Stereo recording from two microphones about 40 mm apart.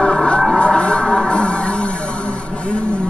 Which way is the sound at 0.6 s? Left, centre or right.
Left.